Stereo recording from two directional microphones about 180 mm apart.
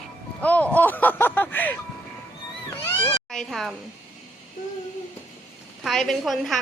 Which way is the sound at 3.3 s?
Centre (ahead or behind).